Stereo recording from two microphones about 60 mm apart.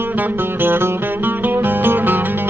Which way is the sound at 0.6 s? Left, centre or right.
Right.